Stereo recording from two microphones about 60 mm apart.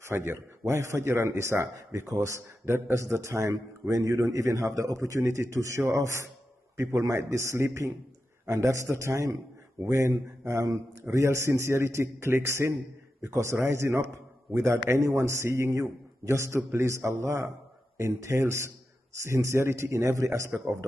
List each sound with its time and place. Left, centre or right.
0.0 s a man's voice: right
4.9 s a man's voice: right